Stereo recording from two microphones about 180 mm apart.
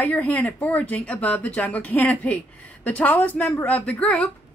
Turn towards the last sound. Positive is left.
turn(degrees=5)  # may be behind; listen again after turning